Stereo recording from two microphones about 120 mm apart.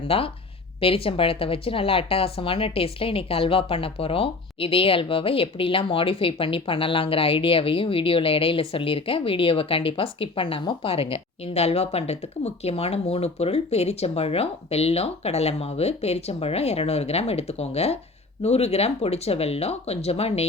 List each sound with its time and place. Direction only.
0.1 s a woman's voice: 50° left (ahead or behind)